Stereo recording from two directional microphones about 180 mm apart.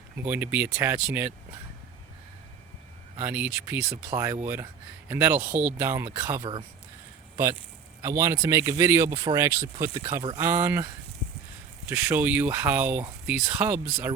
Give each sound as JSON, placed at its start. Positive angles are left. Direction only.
{"t": 0.2, "sound": "speech", "side_deg": -10}
{"t": 3.2, "sound": "speech", "side_deg": -10}
{"t": 6.4, "sound": "speech", "side_deg": -25}
{"t": 8.0, "sound": "speech", "side_deg": -15}
{"t": 11.9, "sound": "speech", "side_deg": -10}